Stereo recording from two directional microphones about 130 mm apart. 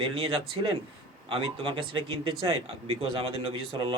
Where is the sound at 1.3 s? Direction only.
40° right (ahead or behind).